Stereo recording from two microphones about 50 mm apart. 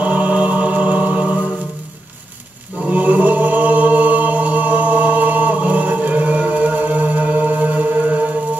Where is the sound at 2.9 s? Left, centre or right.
Right.